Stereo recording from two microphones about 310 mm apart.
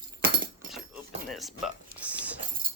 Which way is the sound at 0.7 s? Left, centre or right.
Centre.